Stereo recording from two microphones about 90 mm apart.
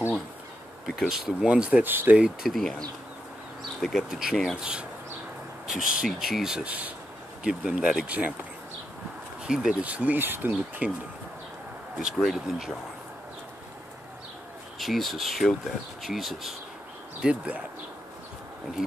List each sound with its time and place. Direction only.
0.8 s speech: 5° right (ahead or behind)
2.4 s speech: 5° left (ahead or behind)
3.8 s speech: 5° right (ahead or behind)
9.4 s speech: 10° right (ahead or behind)
12.2 s speech: centre (ahead or behind)
14.8 s speech: centre (ahead or behind)
18.8 s speech: 5° right (ahead or behind)